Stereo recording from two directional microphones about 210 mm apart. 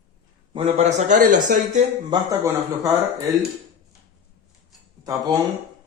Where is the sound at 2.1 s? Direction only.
15° right (ahead or behind).